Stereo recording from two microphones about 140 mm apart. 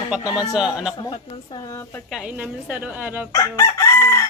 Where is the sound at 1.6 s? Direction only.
20° left (ahead or behind).